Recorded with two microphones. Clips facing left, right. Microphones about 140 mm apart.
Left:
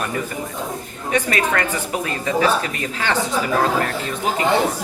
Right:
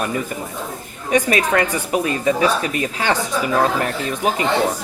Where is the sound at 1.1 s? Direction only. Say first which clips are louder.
Right 3 dB; 20° right (ahead or behind).